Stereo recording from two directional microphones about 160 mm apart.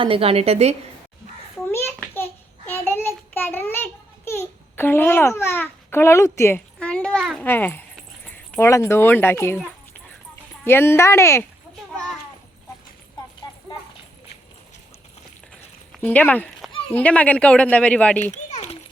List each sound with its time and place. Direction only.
0.0 s a woman's voice: 35° right (ahead or behind)
2.1 s child singing: 15° left (ahead or behind)
4.3 s a child's voice: 15° left (ahead or behind)
6.7 s a sound: 5° left (ahead or behind)
7.4 s speech: 15° left (ahead or behind)
10.6 s speech: 15° left (ahead or behind)
16.0 s speech: 10° left (ahead or behind)
18.2 s a sound: 45° left (ahead or behind)